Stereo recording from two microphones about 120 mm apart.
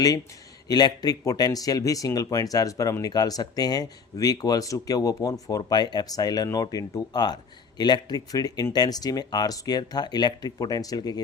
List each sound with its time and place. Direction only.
0.7 s speech: 35° left (ahead or behind)